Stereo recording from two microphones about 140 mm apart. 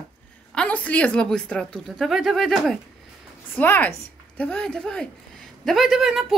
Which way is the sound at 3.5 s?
10° left (ahead or behind).